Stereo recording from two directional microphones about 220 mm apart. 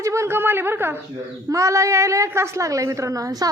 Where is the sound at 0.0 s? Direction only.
10° right (ahead or behind).